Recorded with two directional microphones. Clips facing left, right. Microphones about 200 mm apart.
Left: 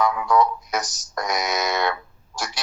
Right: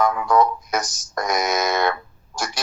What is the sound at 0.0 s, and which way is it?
Speech, 45° right (ahead or behind).